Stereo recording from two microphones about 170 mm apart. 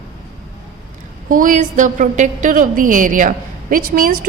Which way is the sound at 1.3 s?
50° right (ahead or behind).